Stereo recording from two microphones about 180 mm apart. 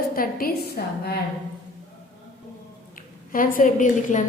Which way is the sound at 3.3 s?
50° left (ahead or behind).